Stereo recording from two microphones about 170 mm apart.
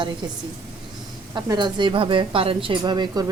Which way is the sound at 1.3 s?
25° right (ahead or behind).